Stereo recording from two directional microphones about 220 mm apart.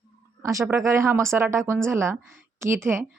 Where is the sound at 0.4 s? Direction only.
15° right (ahead or behind).